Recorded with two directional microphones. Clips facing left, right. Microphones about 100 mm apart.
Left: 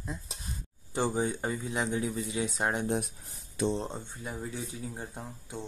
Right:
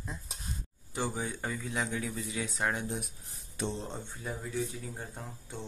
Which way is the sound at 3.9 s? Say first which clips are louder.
Even; 15° left (ahead or behind).